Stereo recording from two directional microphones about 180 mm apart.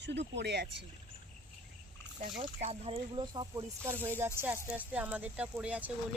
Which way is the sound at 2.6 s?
35° right (ahead or behind).